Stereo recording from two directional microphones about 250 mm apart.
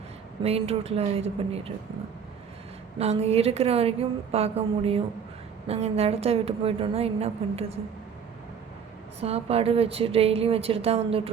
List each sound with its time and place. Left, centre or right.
0.4 s a woman's voice: right
3.0 s a woman's voice: right
9.2 s a woman's voice: right